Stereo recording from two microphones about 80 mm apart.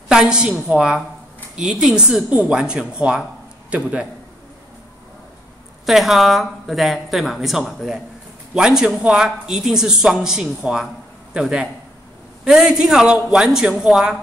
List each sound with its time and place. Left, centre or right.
0.1 s speech: centre
5.9 s a woman's voice: centre